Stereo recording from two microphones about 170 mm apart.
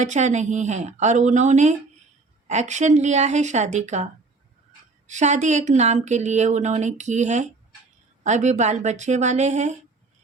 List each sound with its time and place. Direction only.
0.0 s speech: 45° right (ahead or behind)